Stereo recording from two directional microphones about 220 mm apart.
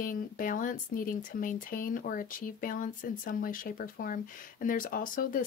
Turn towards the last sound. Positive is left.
turn(degrees=40)  # may be behind; listen again after turning